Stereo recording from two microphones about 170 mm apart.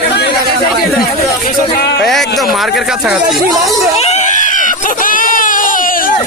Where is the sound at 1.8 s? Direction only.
75° left (ahead or behind).